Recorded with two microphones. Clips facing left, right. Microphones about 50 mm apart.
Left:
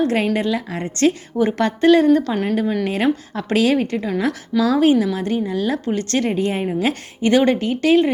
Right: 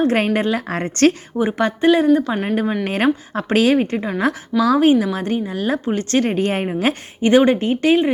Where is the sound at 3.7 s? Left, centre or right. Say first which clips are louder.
Right 1 dB; right.